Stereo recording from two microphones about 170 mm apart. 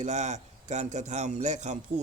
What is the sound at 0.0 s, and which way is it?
A man's voice, 45° right (ahead or behind).